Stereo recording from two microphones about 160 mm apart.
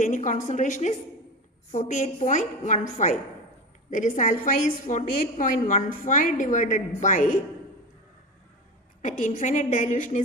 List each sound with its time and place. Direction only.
0.0 s a woman's voice: 50° left (ahead or behind)
9.0 s a woman's voice: 50° left (ahead or behind)